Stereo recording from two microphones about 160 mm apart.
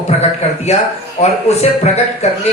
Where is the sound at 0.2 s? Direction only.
40° left (ahead or behind).